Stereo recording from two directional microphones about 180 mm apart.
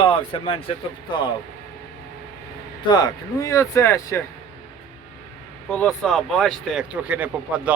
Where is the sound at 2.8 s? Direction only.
25° left (ahead or behind).